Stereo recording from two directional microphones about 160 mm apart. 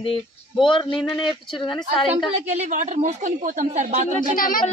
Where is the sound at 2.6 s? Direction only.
50° right (ahead or behind).